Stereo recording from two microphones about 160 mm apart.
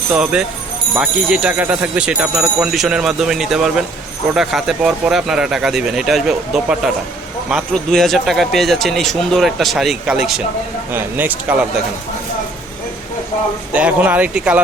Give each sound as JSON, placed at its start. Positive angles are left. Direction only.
{"t": 0.1, "sound": "speech", "side_deg": -5}
{"t": 10.9, "sound": "speech", "side_deg": -15}
{"t": 13.7, "sound": "speech", "side_deg": -10}